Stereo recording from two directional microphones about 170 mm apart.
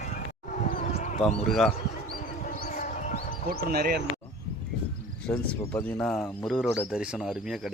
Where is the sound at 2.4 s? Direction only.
55° left (ahead or behind).